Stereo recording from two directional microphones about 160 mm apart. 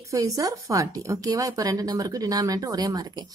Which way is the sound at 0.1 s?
20° right (ahead or behind).